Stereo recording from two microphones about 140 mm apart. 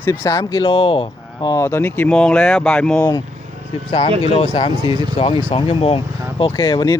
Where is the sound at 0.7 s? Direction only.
40° left (ahead or behind).